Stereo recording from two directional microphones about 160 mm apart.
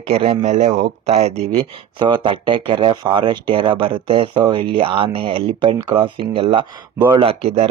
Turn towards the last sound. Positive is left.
turn(degrees=-40)  # may be behind; listen again after turning